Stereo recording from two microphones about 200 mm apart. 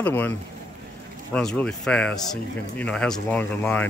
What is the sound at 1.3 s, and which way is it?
Speech, 5° left (ahead or behind).